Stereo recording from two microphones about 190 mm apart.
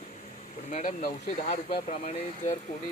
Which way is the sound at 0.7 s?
45° left (ahead or behind).